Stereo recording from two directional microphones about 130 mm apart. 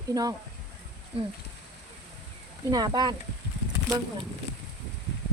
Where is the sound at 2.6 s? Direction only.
30° right (ahead or behind).